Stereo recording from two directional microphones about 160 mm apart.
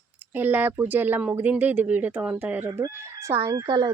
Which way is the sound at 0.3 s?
10° right (ahead or behind).